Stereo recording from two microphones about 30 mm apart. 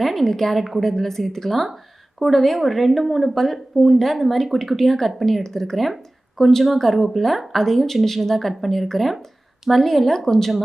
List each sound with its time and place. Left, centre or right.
0.0 s a woman's voice: centre
0.5 s speech: centre
0.8 s speech: centre
3.2 s speech: centre